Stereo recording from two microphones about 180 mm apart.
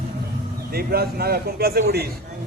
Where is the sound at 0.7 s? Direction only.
60° right (ahead or behind).